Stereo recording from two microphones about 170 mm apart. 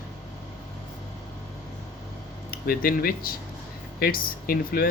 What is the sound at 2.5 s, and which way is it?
Speech, 60° left (ahead or behind).